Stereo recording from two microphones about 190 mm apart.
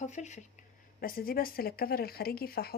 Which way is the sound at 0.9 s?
50° left (ahead or behind).